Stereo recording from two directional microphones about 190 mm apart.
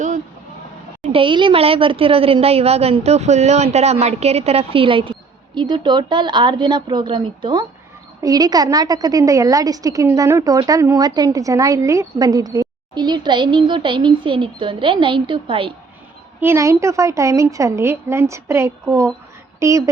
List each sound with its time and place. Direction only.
1.1 s a woman's voice: 25° right (ahead or behind)
16.4 s a woman's voice: 15° right (ahead or behind)